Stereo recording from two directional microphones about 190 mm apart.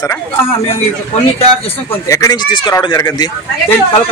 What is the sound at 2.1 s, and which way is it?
Speech, 20° left (ahead or behind).